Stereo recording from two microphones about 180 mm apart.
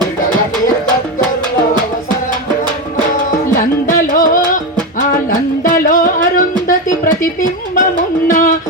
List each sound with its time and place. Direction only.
3.8 s music: 50° left (ahead or behind)
5.6 s music: 50° left (ahead or behind)